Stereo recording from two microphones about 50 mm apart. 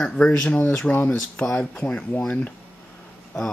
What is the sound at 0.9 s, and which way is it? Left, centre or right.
Speech, left.